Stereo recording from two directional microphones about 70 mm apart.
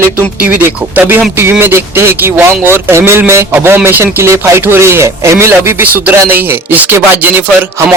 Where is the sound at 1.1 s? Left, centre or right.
Right.